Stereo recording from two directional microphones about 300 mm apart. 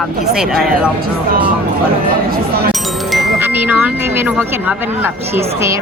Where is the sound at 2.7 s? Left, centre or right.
Centre.